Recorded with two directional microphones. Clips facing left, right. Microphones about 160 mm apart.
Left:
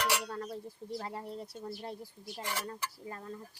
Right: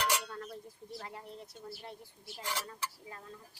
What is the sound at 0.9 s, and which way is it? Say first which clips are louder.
A woman's voice: left 6 dB; 35° left (ahead or behind).